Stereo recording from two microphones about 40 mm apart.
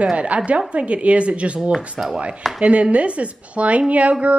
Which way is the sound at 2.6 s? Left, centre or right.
Right.